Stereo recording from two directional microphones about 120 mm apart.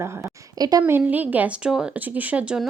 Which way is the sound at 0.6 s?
30° right (ahead or behind).